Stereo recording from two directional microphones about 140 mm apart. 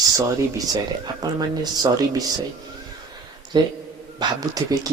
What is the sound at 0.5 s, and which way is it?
Speech, 30° right (ahead or behind).